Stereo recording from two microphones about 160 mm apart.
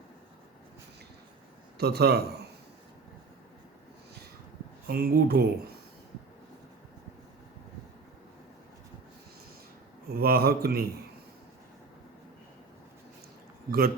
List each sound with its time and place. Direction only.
1.8 s speech: 80° right
4.9 s speech: 70° right (ahead or behind)
10.1 s speech: 70° right (ahead or behind)
13.7 s speech: 70° right (ahead or behind)